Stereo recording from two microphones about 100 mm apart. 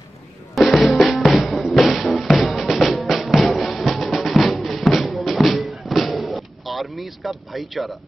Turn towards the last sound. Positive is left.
turn(degrees=0)  # may be behind; listen again after turning